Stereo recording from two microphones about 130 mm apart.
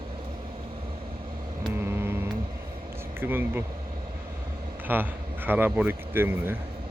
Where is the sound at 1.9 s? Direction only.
15° right (ahead or behind).